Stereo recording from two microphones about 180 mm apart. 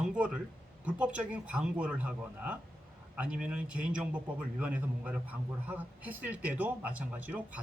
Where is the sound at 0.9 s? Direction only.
5° right (ahead or behind).